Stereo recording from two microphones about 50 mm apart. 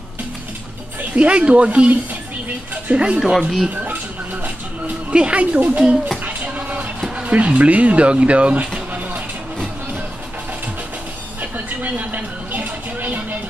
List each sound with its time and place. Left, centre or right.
1.1 s speech: right
3.3 s speech: centre
5.1 s speech: right
6.2 s a sound: right
7.0 s music: centre
7.3 s speech: right
11.5 s a sound: right